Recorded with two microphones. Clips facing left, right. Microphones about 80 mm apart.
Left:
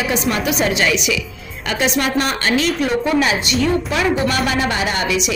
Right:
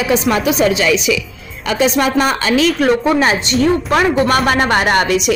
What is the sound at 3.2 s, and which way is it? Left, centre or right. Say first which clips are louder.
A woman's voice: right 4 dB; right.